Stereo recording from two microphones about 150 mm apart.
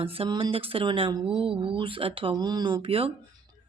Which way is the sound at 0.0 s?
35° right (ahead or behind).